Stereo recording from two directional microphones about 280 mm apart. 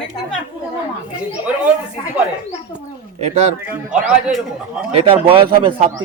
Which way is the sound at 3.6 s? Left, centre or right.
Centre.